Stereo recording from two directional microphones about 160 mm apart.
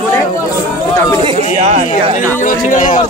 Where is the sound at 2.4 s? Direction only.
55° left (ahead or behind).